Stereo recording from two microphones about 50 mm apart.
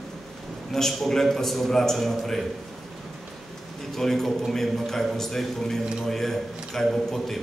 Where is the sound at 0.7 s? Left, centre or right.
Centre.